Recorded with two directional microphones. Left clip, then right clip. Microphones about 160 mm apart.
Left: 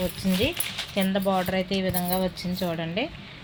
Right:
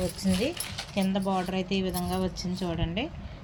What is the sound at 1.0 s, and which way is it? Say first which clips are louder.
A woman's voice: left 4 dB; 40° left (ahead or behind).